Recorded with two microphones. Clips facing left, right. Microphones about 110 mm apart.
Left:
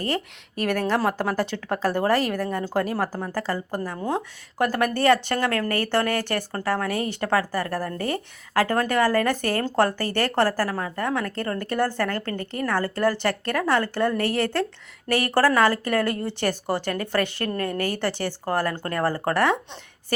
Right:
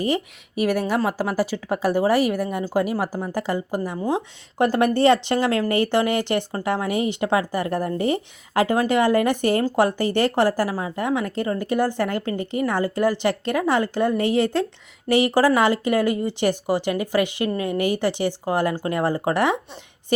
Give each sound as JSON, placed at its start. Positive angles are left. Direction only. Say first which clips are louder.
{"t": 0.0, "sound": "speech", "louder": "right 4 dB", "side_deg": -10}